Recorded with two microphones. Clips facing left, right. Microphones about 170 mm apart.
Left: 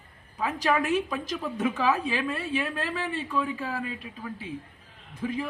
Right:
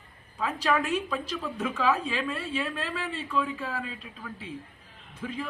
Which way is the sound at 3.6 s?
40° left (ahead or behind).